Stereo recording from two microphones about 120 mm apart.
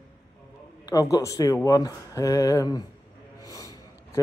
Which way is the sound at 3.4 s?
30° left (ahead or behind).